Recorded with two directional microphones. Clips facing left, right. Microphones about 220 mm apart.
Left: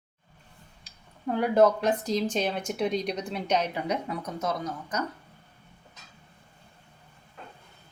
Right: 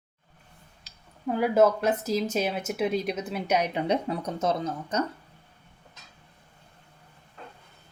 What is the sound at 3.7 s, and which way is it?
Speech, 25° right (ahead or behind).